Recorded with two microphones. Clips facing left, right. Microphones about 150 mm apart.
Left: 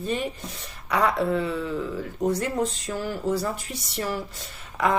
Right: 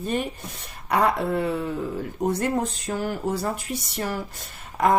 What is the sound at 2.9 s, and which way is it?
Speech, 50° right (ahead or behind).